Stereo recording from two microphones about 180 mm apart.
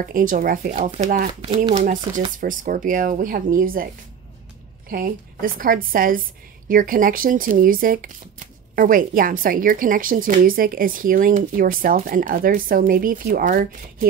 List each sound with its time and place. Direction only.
0.0 s speech: 50° right (ahead or behind)